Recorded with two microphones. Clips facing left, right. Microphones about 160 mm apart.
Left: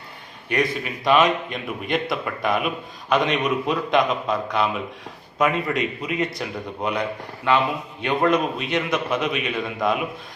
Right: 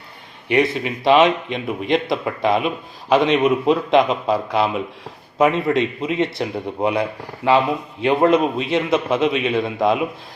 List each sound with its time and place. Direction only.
0.5 s a man's voice: 25° right (ahead or behind)
8.0 s a man's voice: 30° right (ahead or behind)